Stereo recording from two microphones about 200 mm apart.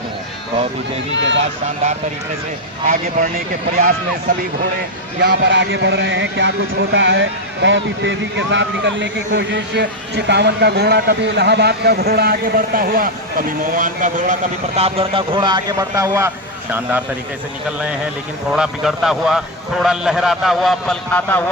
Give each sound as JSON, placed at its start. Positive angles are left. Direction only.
{"t": 1.1, "sound": "speech", "side_deg": -65}
{"t": 2.8, "sound": "speech", "side_deg": -45}
{"t": 5.2, "sound": "speech", "side_deg": -55}
{"t": 18.5, "sound": "a man's voice", "side_deg": -5}